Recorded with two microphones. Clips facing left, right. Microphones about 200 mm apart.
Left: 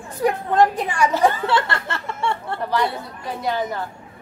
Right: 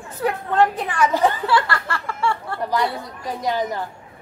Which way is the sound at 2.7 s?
15° right (ahead or behind).